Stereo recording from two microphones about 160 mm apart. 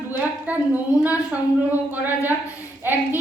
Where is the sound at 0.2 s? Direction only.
10° right (ahead or behind).